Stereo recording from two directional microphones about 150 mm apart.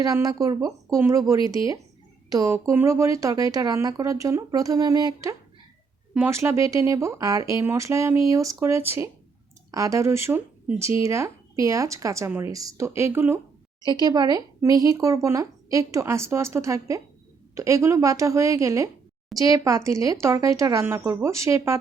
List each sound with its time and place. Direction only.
0.0 s speech: 25° right (ahead or behind)
13.8 s speech: 25° right (ahead or behind)